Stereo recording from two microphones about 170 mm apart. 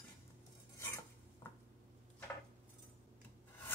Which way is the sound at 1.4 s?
10° left (ahead or behind).